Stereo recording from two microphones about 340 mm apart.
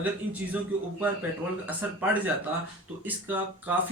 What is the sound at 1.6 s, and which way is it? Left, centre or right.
Speech, centre.